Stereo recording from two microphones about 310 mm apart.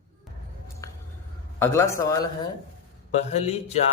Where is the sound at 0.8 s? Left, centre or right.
Centre.